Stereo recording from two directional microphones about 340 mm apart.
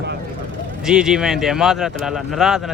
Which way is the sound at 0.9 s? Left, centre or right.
Centre.